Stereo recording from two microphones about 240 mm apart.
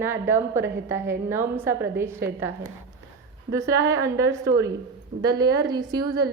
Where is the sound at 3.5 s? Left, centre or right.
Centre.